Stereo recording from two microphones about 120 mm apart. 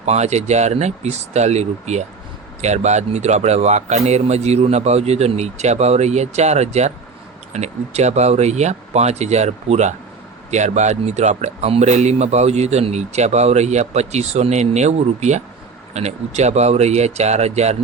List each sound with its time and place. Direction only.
0.0 s a man's voice: 70° right (ahead or behind)